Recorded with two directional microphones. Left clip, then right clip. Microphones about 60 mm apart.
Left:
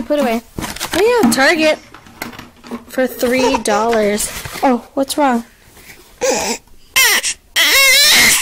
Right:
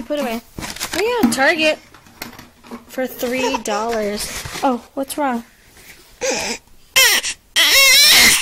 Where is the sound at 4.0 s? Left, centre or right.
Centre.